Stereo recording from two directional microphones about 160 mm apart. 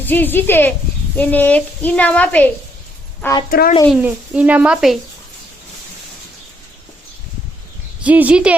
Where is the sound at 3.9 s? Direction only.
5° right (ahead or behind).